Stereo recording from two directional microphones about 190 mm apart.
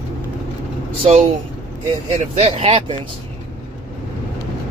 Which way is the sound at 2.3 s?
35° right (ahead or behind).